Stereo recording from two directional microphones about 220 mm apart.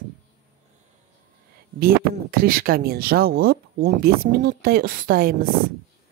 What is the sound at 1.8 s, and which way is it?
Speech, 40° right (ahead or behind).